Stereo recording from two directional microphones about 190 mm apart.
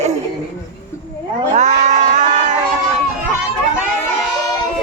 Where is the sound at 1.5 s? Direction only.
40° right (ahead or behind).